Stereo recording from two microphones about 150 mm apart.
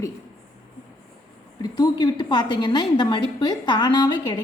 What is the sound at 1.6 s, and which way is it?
A woman's voice, 25° left (ahead or behind).